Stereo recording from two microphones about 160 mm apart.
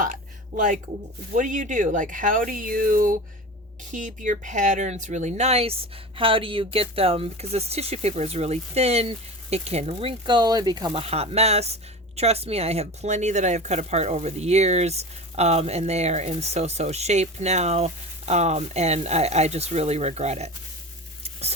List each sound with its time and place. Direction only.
0.0 s a sound: 55° right (ahead or behind)
1.3 s speech: 55° right (ahead or behind); by 11.0 s 25° right (ahead or behind)
11.0 s speech: 40° right (ahead or behind)